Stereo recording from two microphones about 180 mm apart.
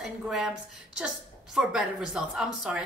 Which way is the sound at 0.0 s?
Centre (ahead or behind).